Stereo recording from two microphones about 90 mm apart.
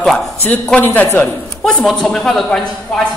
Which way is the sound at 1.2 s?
10° left (ahead or behind).